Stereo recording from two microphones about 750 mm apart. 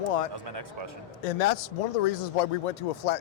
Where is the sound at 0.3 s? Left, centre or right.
Right.